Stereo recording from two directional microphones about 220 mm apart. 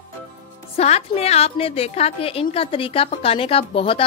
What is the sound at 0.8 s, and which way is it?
A woman's voice, 30° left (ahead or behind).